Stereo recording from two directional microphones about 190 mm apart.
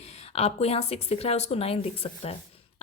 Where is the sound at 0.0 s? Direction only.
30° left (ahead or behind).